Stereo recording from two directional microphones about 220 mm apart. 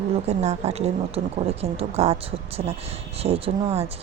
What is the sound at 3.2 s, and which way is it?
Speech, 25° right (ahead or behind).